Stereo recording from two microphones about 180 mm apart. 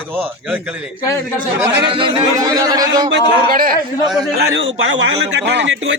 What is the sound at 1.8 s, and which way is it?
Speech, 30° right (ahead or behind).